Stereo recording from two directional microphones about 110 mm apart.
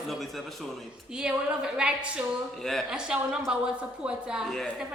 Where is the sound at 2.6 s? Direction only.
5° left (ahead or behind).